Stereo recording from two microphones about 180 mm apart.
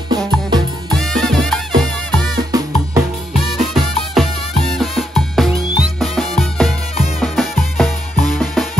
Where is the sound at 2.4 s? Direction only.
20° right (ahead or behind).